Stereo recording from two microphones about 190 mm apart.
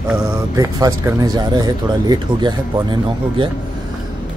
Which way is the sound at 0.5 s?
15° right (ahead or behind).